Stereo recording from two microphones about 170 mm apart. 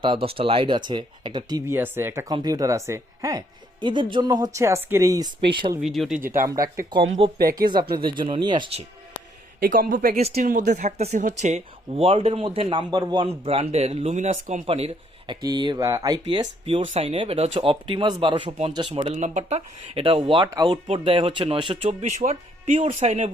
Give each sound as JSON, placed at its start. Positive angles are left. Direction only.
{"t": 0.0, "sound": "speech", "side_deg": -30}
{"t": 5.8, "sound": "speech", "side_deg": 0}
{"t": 6.1, "sound": "speech", "side_deg": -55}
{"t": 6.6, "sound": "speech", "side_deg": -20}
{"t": 7.2, "sound": "speech", "side_deg": -35}
{"t": 7.5, "sound": "speech", "side_deg": -25}
{"t": 9.6, "sound": "a man's voice", "side_deg": -55}
{"t": 10.8, "sound": "speech", "side_deg": -40}
{"t": 15.4, "sound": "speech", "side_deg": -25}
{"t": 22.2, "sound": "speech", "side_deg": -40}